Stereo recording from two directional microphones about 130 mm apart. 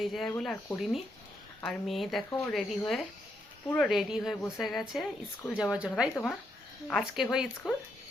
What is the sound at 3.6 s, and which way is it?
Speech, 10° left (ahead or behind).